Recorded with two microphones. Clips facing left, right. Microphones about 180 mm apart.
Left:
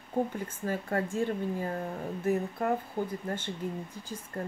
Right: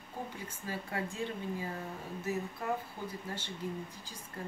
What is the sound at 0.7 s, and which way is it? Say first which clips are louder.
Speech: left 7 dB; 45° left (ahead or behind).